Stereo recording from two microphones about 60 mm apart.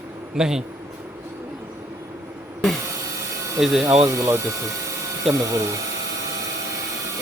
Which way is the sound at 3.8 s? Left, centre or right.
Right.